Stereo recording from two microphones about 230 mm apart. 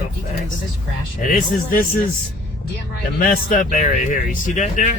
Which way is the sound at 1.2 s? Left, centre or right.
Left.